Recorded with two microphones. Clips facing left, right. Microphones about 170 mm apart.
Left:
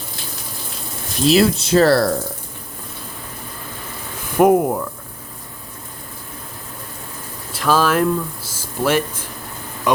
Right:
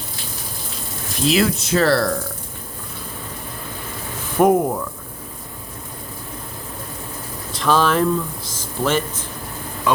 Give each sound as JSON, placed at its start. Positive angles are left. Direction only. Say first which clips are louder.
{"t": 1.3, "sound": "speech", "louder": "left 4 dB", "side_deg": 30}
{"t": 4.4, "sound": "speech", "louder": "left 2 dB", "side_deg": 10}
{"t": 7.5, "sound": "speech", "louder": "left 1 dB", "side_deg": 5}